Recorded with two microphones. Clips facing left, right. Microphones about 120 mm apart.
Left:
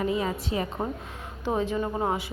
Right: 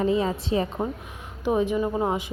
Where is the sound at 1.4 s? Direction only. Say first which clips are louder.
Right 4 dB; 15° right (ahead or behind).